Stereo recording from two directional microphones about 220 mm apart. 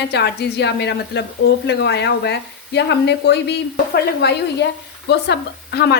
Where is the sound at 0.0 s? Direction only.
50° left (ahead or behind).